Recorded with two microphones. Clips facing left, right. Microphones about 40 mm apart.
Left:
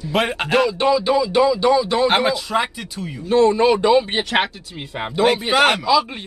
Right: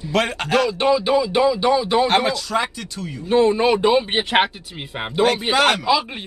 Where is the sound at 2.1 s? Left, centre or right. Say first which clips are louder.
Left 1 dB; centre.